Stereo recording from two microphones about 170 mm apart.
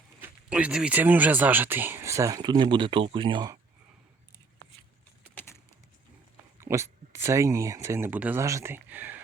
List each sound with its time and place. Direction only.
0.2 s speech: 5° right (ahead or behind); by 3.6 s 25° right (ahead or behind)
5.3 s a sound: 10° left (ahead or behind)
6.6 s speech: 15° right (ahead or behind)